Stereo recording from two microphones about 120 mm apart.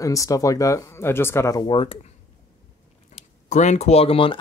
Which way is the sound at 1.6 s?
50° left (ahead or behind).